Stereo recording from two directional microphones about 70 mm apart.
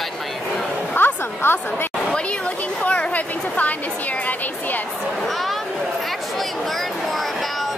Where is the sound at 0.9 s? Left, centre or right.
Left.